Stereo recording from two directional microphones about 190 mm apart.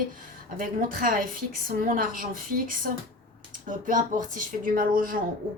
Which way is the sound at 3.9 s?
45° right (ahead or behind).